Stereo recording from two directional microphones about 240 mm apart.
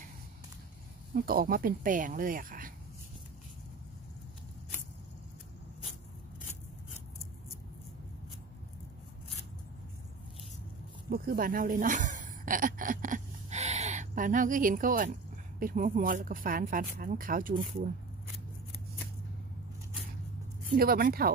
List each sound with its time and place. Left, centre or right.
1.1 s speech: right
11.1 s a sound: right
15.6 s speech: right
20.7 s speech: right